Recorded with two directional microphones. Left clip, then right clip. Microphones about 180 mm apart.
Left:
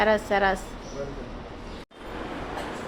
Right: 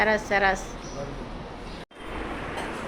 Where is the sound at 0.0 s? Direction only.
20° left (ahead or behind).